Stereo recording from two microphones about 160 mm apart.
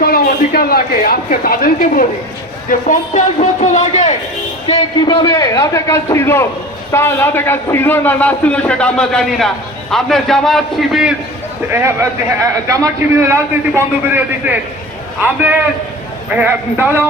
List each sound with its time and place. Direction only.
0.0 s a man's voice: 70° left (ahead or behind); by 4.1 s 45° left (ahead or behind)
4.6 s a man's voice: 30° left (ahead or behind); by 11.1 s centre (ahead or behind)
11.7 s a man's voice: 15° right (ahead or behind)